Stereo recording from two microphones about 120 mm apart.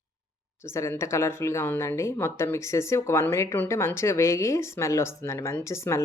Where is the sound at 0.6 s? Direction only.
20° left (ahead or behind).